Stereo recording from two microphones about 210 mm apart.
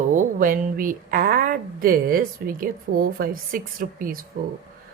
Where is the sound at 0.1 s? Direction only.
40° right (ahead or behind).